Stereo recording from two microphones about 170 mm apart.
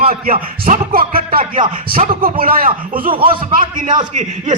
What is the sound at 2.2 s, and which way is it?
Speech, 60° right (ahead or behind).